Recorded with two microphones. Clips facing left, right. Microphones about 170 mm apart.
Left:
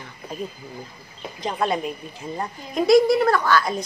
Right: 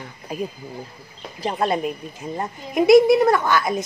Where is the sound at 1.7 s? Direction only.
Centre (ahead or behind).